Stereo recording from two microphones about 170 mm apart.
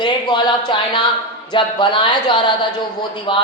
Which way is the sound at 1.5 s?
30° left (ahead or behind).